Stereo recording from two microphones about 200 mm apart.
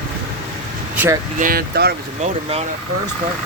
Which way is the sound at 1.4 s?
45° right (ahead or behind).